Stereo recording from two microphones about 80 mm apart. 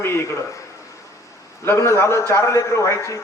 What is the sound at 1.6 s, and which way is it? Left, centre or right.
A man's voice, left.